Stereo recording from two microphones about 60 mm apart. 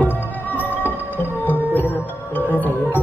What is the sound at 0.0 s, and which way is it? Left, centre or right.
Music, left.